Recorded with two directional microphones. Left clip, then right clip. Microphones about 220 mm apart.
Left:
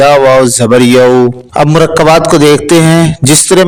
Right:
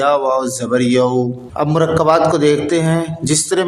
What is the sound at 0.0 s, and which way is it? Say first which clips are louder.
A man's voice: left 11 dB; 45° left (ahead or behind).